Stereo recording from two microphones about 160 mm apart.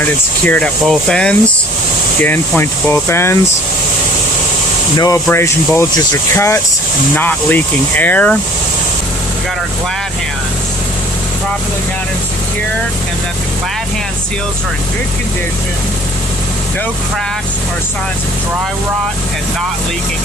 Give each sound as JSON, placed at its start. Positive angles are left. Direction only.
{"t": 0.4, "sound": "speech", "side_deg": 5}
{"t": 4.9, "sound": "speech", "side_deg": 20}